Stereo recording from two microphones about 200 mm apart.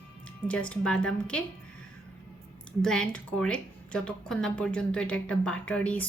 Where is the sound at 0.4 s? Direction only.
5° left (ahead or behind).